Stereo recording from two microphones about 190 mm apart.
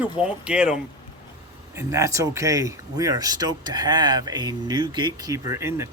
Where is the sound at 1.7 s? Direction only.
15° right (ahead or behind).